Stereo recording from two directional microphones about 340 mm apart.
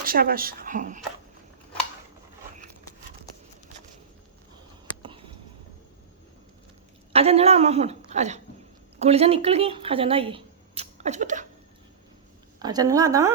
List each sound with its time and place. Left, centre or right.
0.0 s speech: right
7.1 s a woman's voice: centre
12.5 s speech: centre